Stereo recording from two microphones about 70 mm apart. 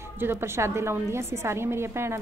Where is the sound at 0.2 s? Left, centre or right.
Right.